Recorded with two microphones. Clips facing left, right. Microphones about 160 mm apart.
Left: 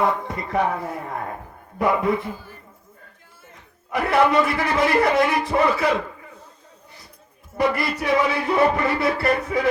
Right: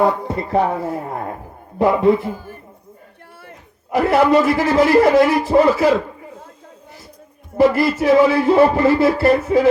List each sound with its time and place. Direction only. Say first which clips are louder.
0.0 s speech: right 5 dB; 30° right (ahead or behind)
1.8 s music: right 6 dB; 30° right (ahead or behind)
3.9 s music: right 5 dB; 25° right (ahead or behind)
7.5 s music: right 8 dB; 25° right (ahead or behind)